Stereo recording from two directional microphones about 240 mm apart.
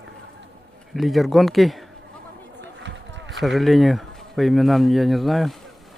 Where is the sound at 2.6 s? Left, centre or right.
Right.